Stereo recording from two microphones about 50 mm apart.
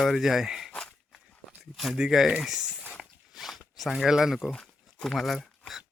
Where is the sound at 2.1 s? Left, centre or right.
Centre.